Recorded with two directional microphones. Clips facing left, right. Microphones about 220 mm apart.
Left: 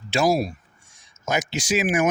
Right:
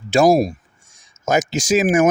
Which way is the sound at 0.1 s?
50° right (ahead or behind).